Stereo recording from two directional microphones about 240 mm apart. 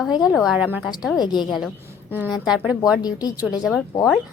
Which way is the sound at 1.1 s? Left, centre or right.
Centre.